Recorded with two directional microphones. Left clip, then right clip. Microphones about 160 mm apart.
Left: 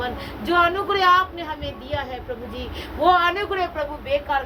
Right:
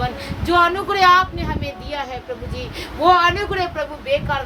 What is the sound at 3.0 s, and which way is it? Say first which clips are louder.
Speech: right 3 dB; 25° right (ahead or behind).